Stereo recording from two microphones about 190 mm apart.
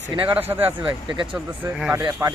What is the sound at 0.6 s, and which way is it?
Speech, 25° right (ahead or behind).